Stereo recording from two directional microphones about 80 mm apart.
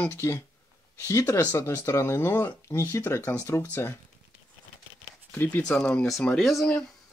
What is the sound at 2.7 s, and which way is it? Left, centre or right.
Speech, left.